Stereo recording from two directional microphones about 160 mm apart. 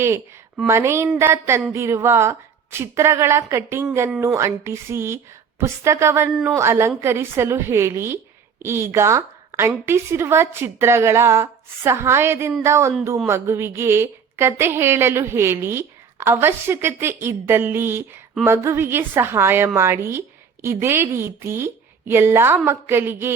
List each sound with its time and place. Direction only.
0.0 s a woman's voice: 15° right (ahead or behind)